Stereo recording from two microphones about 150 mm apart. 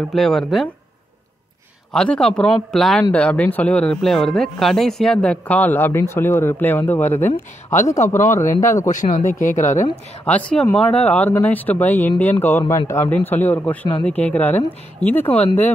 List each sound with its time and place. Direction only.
0.1 s speech: centre (ahead or behind)
1.9 s a man's voice: 5° left (ahead or behind)
7.2 s speech: 55° left (ahead or behind)
7.9 s speech: 20° left (ahead or behind)
8.5 s speech: 60° left (ahead or behind)
10.2 s a man's voice: 10° left (ahead or behind)